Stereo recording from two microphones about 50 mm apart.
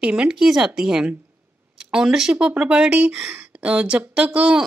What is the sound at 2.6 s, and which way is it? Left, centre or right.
Speech, right.